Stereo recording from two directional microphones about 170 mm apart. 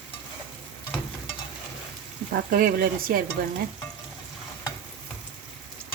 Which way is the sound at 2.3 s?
60° right (ahead or behind).